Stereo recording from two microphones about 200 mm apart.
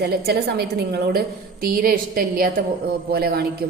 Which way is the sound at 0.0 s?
55° right (ahead or behind).